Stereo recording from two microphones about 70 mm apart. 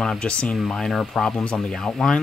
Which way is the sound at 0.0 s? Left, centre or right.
Centre.